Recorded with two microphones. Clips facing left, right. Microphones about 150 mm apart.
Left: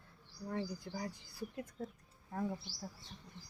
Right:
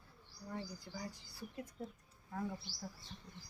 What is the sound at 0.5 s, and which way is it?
Speech, 75° left (ahead or behind).